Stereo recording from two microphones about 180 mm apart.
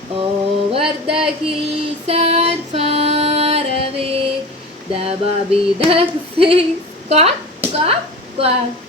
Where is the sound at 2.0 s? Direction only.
35° right (ahead or behind).